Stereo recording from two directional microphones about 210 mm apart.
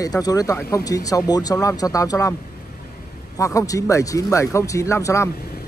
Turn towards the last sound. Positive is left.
turn(degrees=15)  # may be behind; listen again after turning